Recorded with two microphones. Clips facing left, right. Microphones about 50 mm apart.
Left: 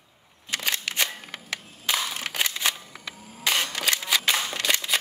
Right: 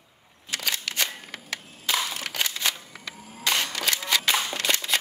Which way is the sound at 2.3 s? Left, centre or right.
Centre.